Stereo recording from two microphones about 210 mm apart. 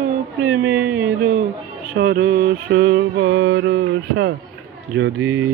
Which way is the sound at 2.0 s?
55° right (ahead or behind).